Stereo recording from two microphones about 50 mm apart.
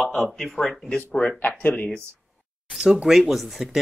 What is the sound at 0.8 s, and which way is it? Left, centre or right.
Speech, left.